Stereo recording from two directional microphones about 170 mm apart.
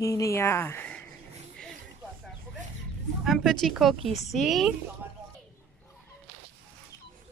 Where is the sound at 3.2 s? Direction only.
Centre (ahead or behind).